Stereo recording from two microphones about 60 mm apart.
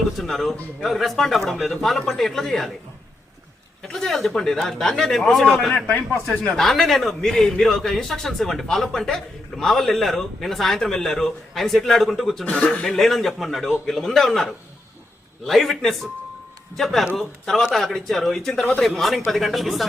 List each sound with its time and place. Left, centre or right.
0.2 s a man's voice: centre
3.8 s a man's voice: centre
6.5 s a man's voice: centre
12.5 s a man's voice: left
12.9 s a man's voice: centre